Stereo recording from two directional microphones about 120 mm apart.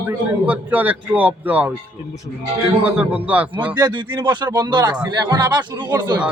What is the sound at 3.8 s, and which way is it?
Speech, 40° right (ahead or behind).